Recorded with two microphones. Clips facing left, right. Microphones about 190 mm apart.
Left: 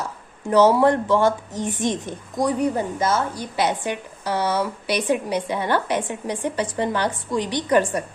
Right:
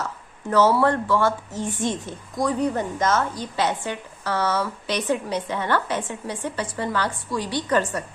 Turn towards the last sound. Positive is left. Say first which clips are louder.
# left 3 dB
turn(degrees=15)  # may be behind; listen again after turning